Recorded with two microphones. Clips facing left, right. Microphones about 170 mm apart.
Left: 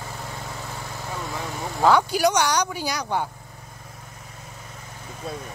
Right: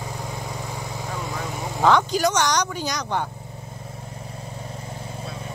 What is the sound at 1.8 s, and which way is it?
Speech, 5° left (ahead or behind).